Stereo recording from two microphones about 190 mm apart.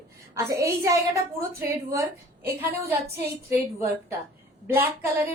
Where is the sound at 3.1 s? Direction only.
15° right (ahead or behind).